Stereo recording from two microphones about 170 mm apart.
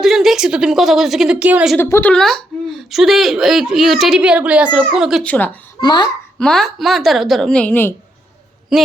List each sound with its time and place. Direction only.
0.0 s a woman's voice: centre (ahead or behind)
1.8 s a woman's voice: 10° left (ahead or behind); by 5.2 s 5° right (ahead or behind)
5.2 s speech: 10° left (ahead or behind)
5.8 s speech: 25° left (ahead or behind)
6.4 s a woman's voice: centre (ahead or behind)